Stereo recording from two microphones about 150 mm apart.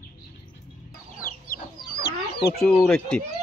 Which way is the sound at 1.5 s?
80° left.